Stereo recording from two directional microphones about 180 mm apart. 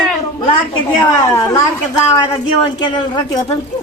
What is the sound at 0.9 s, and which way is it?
Speech, 20° left (ahead or behind).